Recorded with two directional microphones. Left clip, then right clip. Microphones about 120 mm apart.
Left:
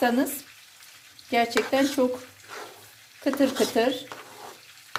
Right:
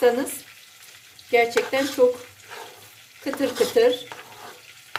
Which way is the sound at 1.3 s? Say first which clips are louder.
Right 4 dB; 50° left (ahead or behind).